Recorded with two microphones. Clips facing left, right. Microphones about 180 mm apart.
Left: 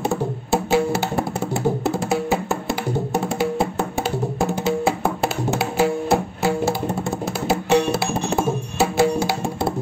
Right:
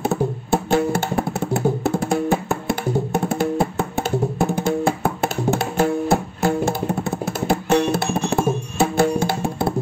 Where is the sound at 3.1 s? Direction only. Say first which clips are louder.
Right 1 dB; 55° right (ahead or behind).